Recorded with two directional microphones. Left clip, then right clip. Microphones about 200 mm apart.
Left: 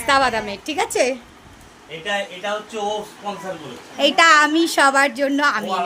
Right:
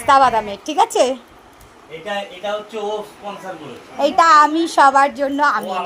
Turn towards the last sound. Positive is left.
turn(degrees=10)  # may be behind; listen again after turning